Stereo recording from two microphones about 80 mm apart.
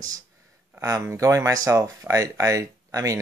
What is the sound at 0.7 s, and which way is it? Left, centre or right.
Speech, right.